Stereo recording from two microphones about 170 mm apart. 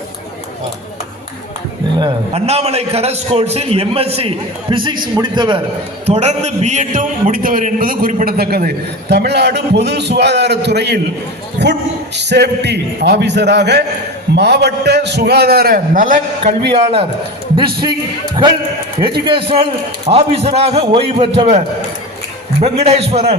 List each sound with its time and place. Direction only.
2.0 s a man's voice: 30° right (ahead or behind)
6.1 s a man's voice: 40° right (ahead or behind)
16.7 s a man's voice: 35° right (ahead or behind)
19.2 s a man's voice: 30° right (ahead or behind)
22.8 s a man's voice: 35° right (ahead or behind)